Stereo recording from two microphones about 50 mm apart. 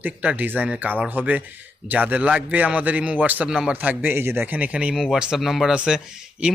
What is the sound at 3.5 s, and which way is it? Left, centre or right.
Speech, centre.